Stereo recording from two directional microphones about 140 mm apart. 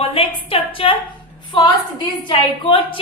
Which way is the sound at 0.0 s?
40° left (ahead or behind).